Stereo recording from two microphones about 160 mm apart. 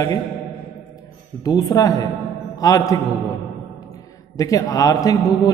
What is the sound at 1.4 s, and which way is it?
A man's voice, 25° left (ahead or behind).